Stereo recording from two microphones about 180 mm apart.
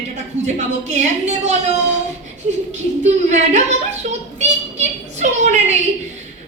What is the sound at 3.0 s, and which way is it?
A woman's voice, 40° right (ahead or behind).